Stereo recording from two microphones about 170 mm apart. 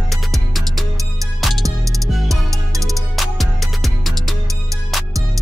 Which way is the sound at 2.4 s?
20° right (ahead or behind).